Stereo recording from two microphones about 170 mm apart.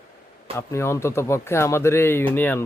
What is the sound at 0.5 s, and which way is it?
Speech, 15° left (ahead or behind).